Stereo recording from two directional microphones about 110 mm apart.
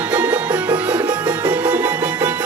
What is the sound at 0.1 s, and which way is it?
Music, 15° right (ahead or behind).